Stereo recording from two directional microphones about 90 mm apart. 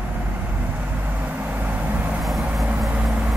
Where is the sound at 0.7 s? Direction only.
20° right (ahead or behind).